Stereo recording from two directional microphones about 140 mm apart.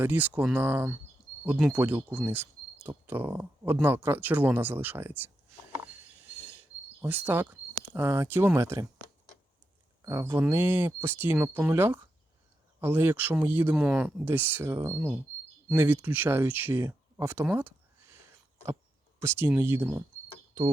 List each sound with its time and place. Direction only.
0.0 s speech: 15° right (ahead or behind)
5.7 s cricket: 10° right (ahead or behind)
7.0 s speech: 15° right (ahead or behind)
10.0 s speech: 20° right (ahead or behind)
14.9 s speech: 5° right (ahead or behind)
19.2 s speech: 15° right (ahead or behind)